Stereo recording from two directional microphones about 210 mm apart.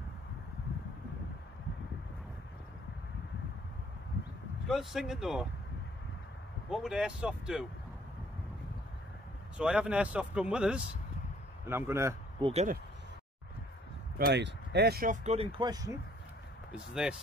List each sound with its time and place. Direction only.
4.6 s speech: centre (ahead or behind)
6.7 s speech: centre (ahead or behind)
9.6 s a man's voice: 5° right (ahead or behind)
12.4 s speech: 25° right (ahead or behind)
14.1 s speech: 50° right (ahead or behind)
15.2 s speech: 30° right (ahead or behind)
16.7 s speech: 5° right (ahead or behind)